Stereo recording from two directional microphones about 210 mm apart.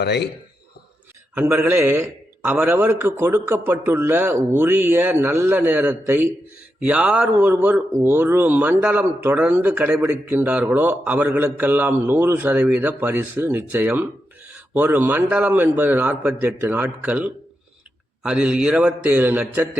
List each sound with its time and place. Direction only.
0.0 s a man's voice: 50° left (ahead or behind)
1.4 s a man's voice: 10° right (ahead or behind)